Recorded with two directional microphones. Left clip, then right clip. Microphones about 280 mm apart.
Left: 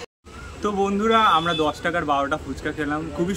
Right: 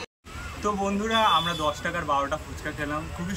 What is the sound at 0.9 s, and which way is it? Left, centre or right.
Speech, left.